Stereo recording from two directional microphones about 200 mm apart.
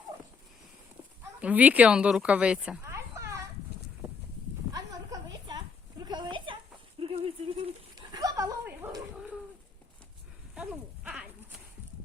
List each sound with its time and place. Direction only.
1.4 s speech: 5° right (ahead or behind)
4.7 s a sound: 20° right (ahead or behind)
10.5 s sheep: 5° right (ahead or behind)